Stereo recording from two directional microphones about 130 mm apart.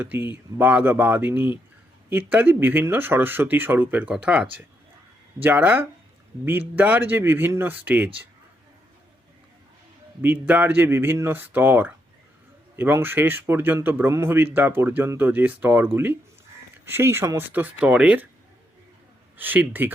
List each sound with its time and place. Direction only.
0.0 s speech: 15° right (ahead or behind)
10.2 s speech: 15° right (ahead or behind)
19.4 s speech: 15° right (ahead or behind)